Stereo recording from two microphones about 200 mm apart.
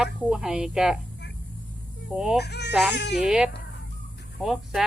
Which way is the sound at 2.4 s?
55° left (ahead or behind).